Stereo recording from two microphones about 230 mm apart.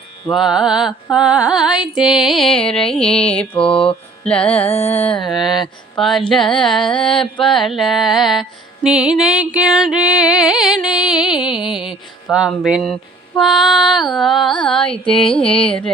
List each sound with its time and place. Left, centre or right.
0.3 s music: centre
4.6 s mantra: left
5.1 s music: centre
7.1 s mantra: left
7.4 s music: centre